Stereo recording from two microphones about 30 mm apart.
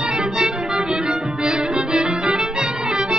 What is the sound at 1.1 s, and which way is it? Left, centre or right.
Music, right.